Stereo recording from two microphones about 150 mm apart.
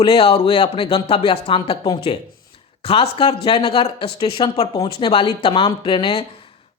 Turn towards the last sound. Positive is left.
turn(degrees=30)  # may be behind; listen again after turning